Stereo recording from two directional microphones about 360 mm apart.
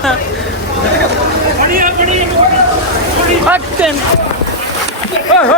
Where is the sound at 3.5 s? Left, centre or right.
Centre.